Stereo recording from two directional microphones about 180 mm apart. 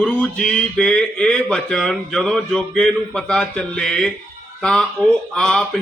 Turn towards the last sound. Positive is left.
turn(degrees=5)  # may be behind; listen again after turning